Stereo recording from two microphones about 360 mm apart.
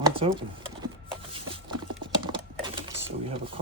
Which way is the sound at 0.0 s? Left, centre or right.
Centre.